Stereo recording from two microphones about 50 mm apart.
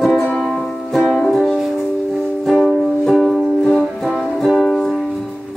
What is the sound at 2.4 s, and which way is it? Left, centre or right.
Music, centre.